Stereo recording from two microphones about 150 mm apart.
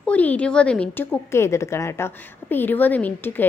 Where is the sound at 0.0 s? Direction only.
10° left (ahead or behind).